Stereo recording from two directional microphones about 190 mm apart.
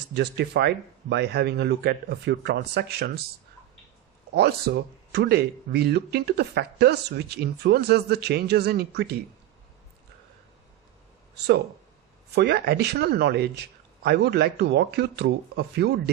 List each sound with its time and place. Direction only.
0.1 s a man's voice: 60° right (ahead or behind)
4.4 s a man's voice: 60° right (ahead or behind)
12.3 s a man's voice: 60° right (ahead or behind)